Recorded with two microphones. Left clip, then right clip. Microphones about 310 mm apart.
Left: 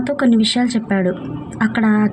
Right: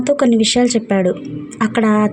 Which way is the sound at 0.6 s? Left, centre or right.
Centre.